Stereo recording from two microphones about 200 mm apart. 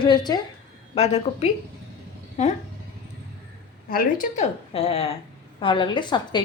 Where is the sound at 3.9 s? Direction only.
45° left (ahead or behind).